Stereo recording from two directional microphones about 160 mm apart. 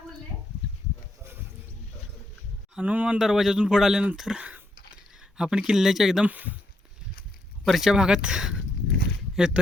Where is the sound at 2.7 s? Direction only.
10° right (ahead or behind).